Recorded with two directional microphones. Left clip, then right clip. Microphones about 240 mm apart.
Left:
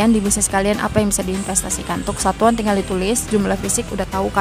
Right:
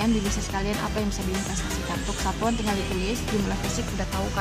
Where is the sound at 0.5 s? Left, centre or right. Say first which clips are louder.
Left 12 dB; left.